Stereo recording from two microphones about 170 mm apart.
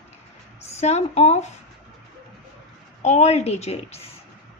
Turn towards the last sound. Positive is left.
turn(degrees=40)  # may be behind; listen again after turning